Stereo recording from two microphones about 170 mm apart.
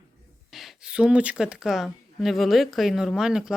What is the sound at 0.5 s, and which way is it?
Speech, 5° right (ahead or behind).